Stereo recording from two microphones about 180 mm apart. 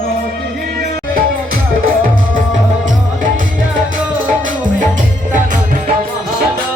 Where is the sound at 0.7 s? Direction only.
50° right (ahead or behind).